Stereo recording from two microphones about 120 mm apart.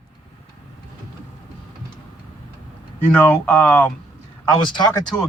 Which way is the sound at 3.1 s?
15° left (ahead or behind).